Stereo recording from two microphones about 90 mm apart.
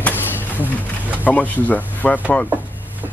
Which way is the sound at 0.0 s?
20° left (ahead or behind).